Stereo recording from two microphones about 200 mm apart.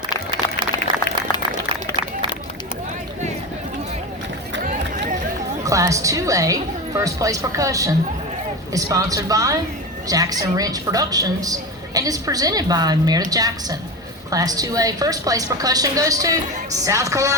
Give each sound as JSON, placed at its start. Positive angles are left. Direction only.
{"t": 5.6, "sound": "a woman's voice", "side_deg": -15}